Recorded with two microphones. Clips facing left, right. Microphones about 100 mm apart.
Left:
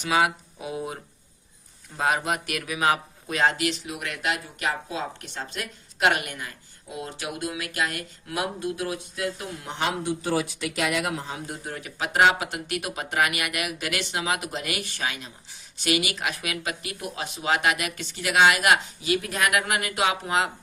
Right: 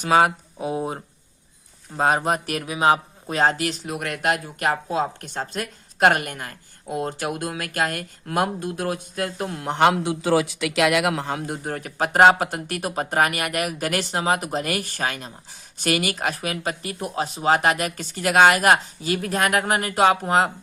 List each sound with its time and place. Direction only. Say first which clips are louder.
0.0 s speech: right 5 dB; 45° right (ahead or behind)